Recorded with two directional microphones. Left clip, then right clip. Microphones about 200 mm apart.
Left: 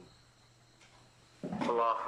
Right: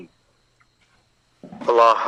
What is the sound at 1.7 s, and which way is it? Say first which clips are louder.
Speech: right 17 dB; 55° right (ahead or behind).